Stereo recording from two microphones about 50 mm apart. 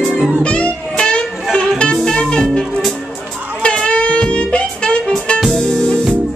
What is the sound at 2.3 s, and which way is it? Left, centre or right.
Music, centre.